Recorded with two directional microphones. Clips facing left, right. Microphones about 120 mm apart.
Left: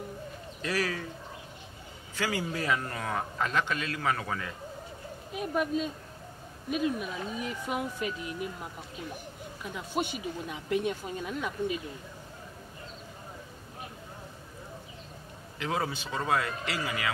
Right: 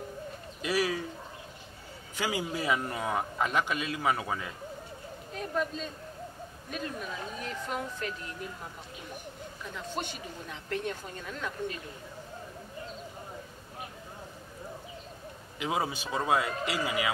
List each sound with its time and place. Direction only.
0.6 s speech: 15° right (ahead or behind)
2.1 s speech: 15° right (ahead or behind)
5.3 s speech: 10° left (ahead or behind)
9.6 s speech: 10° left (ahead or behind)
15.6 s speech: 15° right (ahead or behind)